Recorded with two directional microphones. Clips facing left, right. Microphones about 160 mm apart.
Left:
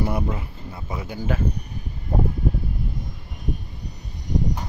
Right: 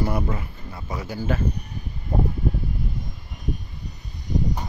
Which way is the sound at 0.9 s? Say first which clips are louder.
Right 1 dB; 20° left (ahead or behind).